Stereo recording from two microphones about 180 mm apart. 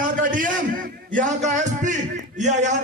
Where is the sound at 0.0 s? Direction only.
50° right (ahead or behind).